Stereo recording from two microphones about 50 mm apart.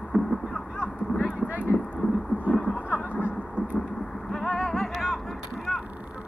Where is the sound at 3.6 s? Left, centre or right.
Right.